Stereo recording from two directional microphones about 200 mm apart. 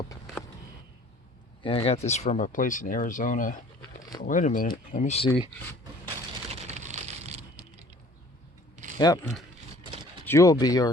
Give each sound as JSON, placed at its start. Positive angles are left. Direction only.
{"t": 1.6, "sound": "speech", "side_deg": 30}
{"t": 6.1, "sound": "splinter", "side_deg": -35}
{"t": 8.7, "sound": "a sound", "side_deg": -40}
{"t": 9.0, "sound": "speech", "side_deg": 20}
{"t": 10.2, "sound": "speech", "side_deg": 15}